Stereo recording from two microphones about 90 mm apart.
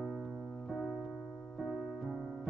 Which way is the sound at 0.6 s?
Centre (ahead or behind).